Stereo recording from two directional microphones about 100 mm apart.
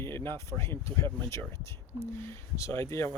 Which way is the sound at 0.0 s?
25° left (ahead or behind).